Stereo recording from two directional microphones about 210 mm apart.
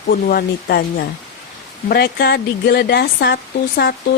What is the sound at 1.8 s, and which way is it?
Speech, 50° left (ahead or behind).